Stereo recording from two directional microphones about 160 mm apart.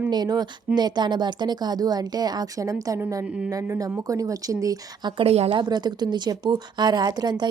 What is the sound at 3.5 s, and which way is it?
A woman's voice, 20° right (ahead or behind).